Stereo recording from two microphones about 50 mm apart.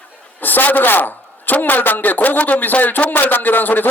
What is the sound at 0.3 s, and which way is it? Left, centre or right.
A man's voice, left.